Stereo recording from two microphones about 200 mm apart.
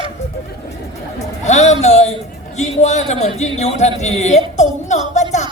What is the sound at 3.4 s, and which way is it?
A woman's voice, 35° left (ahead or behind).